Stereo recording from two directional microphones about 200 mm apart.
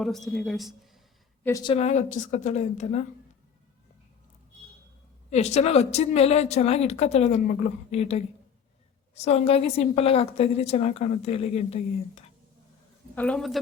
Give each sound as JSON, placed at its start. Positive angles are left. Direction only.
{"t": 0.0, "sound": "speech", "side_deg": 0}
{"t": 1.5, "sound": "speech", "side_deg": 15}
{"t": 1.7, "sound": "a woman's voice", "side_deg": 35}
{"t": 5.3, "sound": "a woman's voice", "side_deg": 35}
{"t": 13.1, "sound": "speech", "side_deg": 5}